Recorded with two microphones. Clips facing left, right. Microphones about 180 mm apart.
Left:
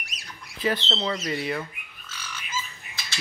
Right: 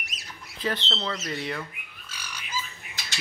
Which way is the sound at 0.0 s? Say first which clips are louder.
Even; centre (ahead or behind).